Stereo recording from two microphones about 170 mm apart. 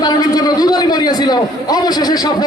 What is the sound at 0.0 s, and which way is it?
A man's voice, 25° left (ahead or behind).